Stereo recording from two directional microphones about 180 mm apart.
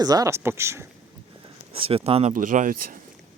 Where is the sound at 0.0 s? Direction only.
20° right (ahead or behind).